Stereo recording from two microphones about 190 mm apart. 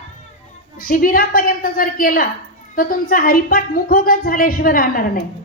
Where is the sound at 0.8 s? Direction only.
50° left (ahead or behind).